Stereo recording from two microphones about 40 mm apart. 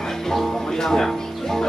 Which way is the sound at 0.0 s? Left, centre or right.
Centre.